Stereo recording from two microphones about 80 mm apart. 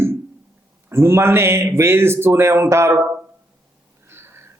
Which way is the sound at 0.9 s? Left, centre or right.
Right.